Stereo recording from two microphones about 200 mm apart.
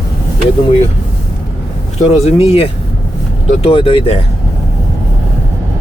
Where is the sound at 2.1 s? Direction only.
30° left (ahead or behind).